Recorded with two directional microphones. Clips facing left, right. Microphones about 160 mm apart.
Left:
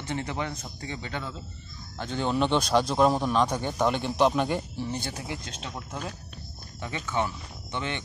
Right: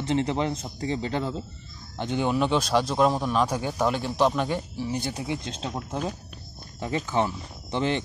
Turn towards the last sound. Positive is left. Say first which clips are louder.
# right 7 dB
turn(degrees=-30)  # may be behind; listen again after turning